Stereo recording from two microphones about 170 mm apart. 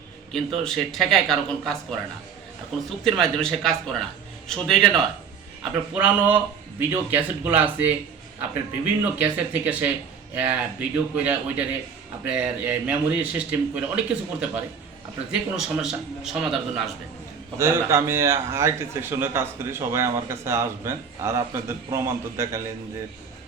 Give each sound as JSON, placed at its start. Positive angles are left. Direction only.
{"t": 0.6, "sound": "a man's voice", "side_deg": 0}
{"t": 3.0, "sound": "a man's voice", "side_deg": 0}
{"t": 5.9, "sound": "a man's voice", "side_deg": -10}
{"t": 17.6, "sound": "a man's voice", "side_deg": -15}